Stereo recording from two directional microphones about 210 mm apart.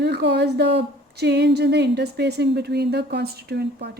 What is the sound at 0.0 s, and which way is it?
A woman's voice, 55° right (ahead or behind).